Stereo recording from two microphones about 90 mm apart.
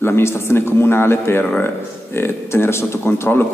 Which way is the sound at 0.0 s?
30° left (ahead or behind).